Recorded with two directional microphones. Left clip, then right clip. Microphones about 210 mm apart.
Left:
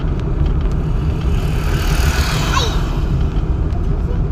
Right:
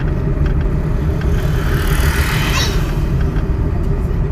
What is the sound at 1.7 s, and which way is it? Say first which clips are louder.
Vehicle: right 1 dB; 40° left (ahead or behind).